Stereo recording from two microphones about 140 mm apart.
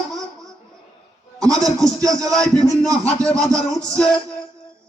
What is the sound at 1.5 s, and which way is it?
Music, 5° left (ahead or behind).